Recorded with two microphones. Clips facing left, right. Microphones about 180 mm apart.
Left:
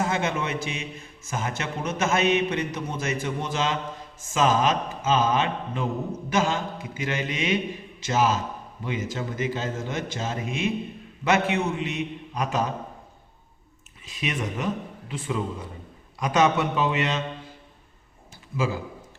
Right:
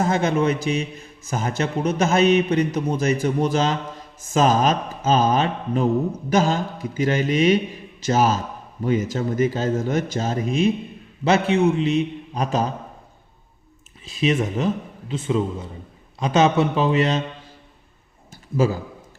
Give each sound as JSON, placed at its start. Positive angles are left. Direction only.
{"t": 0.0, "sound": "a man's voice", "side_deg": -35}
{"t": 14.0, "sound": "a man's voice", "side_deg": -30}